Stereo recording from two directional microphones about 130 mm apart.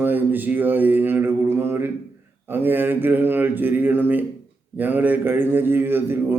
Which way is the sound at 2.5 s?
15° right (ahead or behind).